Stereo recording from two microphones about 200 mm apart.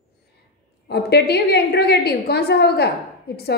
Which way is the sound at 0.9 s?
55° left (ahead or behind).